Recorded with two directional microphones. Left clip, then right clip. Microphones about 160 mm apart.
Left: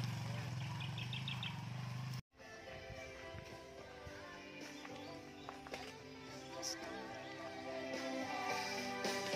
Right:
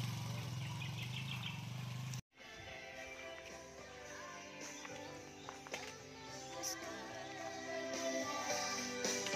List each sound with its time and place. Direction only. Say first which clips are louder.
6.9 s music: right 1 dB; 40° left (ahead or behind)